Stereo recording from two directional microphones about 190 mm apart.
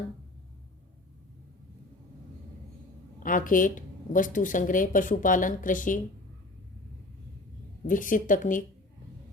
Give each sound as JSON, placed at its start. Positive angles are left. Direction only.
{"t": 3.2, "sound": "a woman's voice", "side_deg": 45}
{"t": 7.9, "sound": "a woman's voice", "side_deg": 45}